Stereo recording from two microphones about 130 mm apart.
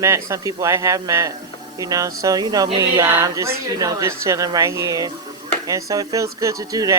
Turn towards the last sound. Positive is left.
turn(degrees=-25)  # may be behind; listen again after turning